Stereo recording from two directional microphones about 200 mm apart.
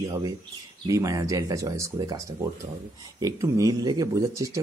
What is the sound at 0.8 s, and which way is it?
Speech, 15° right (ahead or behind).